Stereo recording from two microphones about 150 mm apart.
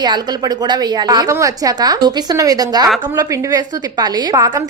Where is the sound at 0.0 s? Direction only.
30° right (ahead or behind).